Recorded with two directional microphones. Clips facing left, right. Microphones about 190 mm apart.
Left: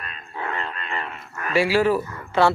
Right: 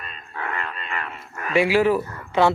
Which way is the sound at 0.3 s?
25° left (ahead or behind).